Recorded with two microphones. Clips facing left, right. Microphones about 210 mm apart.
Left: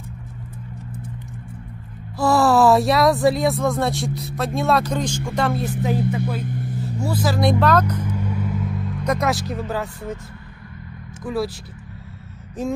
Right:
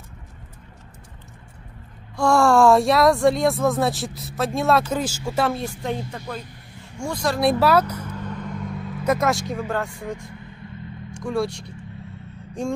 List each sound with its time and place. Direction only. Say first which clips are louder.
2.1 s speech: even; 5° left (ahead or behind)
8.0 s vehicle: left 5 dB; 10° left (ahead or behind)
9.7 s speech: even; 5° left (ahead or behind)